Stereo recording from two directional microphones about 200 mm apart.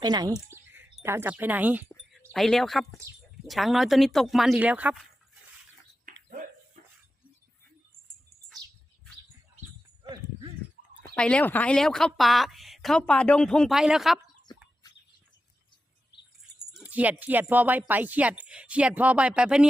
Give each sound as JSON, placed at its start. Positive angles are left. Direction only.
{"t": 0.0, "sound": "speech", "side_deg": -20}
{"t": 1.9, "sound": "a sound", "side_deg": 5}
{"t": 3.4, "sound": "speech", "side_deg": 0}
{"t": 10.0, "sound": "horse", "side_deg": -25}
{"t": 11.1, "sound": "speech", "side_deg": 5}
{"t": 14.4, "sound": "chop", "side_deg": 20}
{"t": 16.7, "sound": "speech", "side_deg": -10}